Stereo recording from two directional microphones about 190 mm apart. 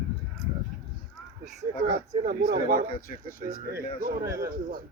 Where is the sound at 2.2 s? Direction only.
45° right (ahead or behind).